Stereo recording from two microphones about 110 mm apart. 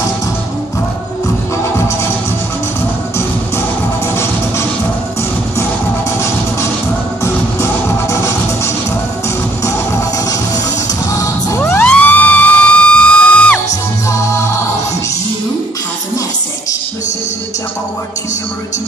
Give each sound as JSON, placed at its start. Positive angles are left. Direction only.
{"t": 4.1, "sound": "music", "side_deg": 25}
{"t": 7.6, "sound": "music", "side_deg": 25}
{"t": 9.7, "sound": "music", "side_deg": 30}
{"t": 11.8, "sound": "music", "side_deg": 10}
{"t": 14.1, "sound": "music", "side_deg": 25}